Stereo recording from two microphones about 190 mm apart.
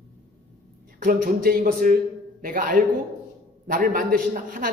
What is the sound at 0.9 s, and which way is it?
A man's voice, 45° right (ahead or behind).